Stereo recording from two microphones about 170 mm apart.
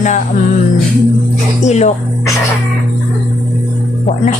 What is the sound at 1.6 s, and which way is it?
Speech, 40° left (ahead or behind).